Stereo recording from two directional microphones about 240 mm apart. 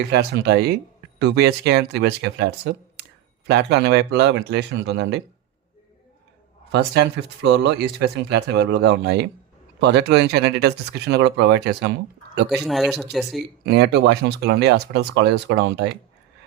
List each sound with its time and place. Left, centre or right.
0.1 s speech: right
6.7 s speech: right
12.5 s speech: centre
13.7 s speech: right